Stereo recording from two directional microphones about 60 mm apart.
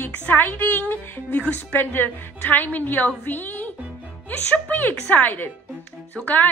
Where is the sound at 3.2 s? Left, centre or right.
Left.